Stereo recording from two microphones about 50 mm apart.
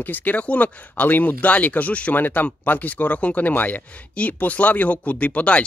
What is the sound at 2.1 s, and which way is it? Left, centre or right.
Speech, left.